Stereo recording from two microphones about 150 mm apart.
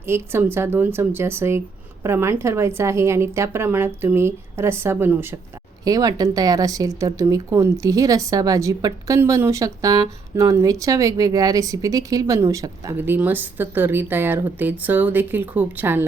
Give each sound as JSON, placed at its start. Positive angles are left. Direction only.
{"t": 0.0, "sound": "a woman's voice", "side_deg": -15}
{"t": 13.0, "sound": "a woman's voice", "side_deg": -10}